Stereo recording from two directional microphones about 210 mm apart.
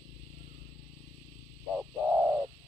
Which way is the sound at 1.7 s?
5° right (ahead or behind).